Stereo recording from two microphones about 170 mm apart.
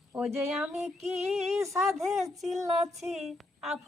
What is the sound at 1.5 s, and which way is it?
Speech, 15° right (ahead or behind).